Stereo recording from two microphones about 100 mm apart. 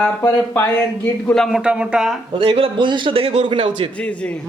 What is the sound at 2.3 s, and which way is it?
A man's voice, 50° right (ahead or behind).